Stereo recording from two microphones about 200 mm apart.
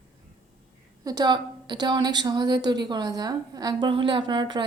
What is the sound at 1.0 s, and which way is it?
A woman's voice, 20° right (ahead or behind).